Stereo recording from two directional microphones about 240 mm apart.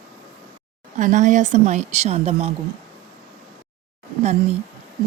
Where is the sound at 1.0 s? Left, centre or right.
Right.